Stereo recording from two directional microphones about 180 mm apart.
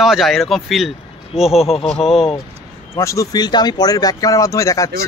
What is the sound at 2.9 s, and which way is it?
A man's voice, 15° left (ahead or behind).